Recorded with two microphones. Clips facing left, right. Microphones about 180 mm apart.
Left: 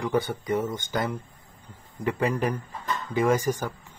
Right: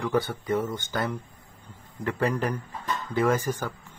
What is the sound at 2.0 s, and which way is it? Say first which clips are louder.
Speech: left 1 dB; 15° left (ahead or behind).